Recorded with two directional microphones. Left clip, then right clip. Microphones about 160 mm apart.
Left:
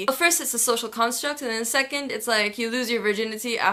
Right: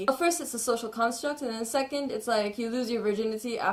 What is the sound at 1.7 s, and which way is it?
Speech, 10° left (ahead or behind).